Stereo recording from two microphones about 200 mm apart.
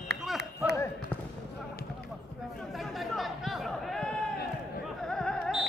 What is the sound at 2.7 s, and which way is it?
Chatter, centre (ahead or behind).